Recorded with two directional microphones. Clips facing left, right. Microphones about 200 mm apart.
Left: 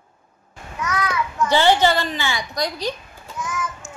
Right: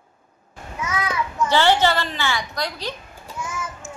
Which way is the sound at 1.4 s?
15° left (ahead or behind).